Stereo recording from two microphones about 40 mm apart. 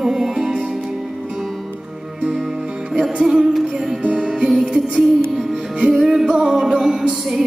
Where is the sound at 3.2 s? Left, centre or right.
Centre.